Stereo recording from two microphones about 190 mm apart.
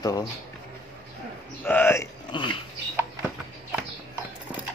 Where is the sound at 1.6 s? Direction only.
10° left (ahead or behind).